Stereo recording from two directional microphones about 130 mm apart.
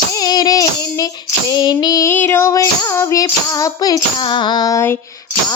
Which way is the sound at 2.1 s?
15° left (ahead or behind).